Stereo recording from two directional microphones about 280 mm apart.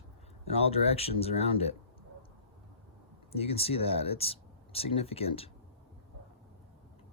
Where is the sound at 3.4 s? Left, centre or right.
Left.